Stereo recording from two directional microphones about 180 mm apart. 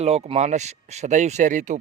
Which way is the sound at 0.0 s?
35° right (ahead or behind).